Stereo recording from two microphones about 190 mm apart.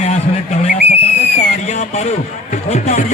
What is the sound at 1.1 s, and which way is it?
Speech, 40° left (ahead or behind).